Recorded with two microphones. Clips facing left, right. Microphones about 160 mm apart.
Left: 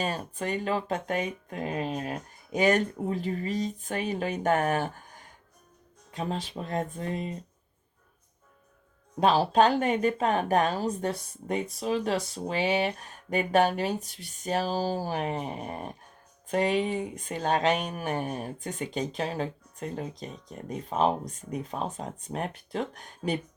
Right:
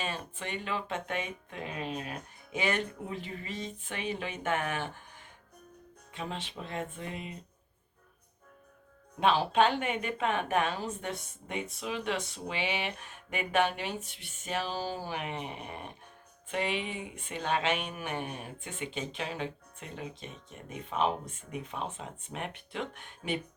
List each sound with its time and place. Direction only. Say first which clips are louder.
0.0 s speech: left 6 dB; 40° left (ahead or behind)
9.2 s speech: left 4 dB; 40° left (ahead or behind)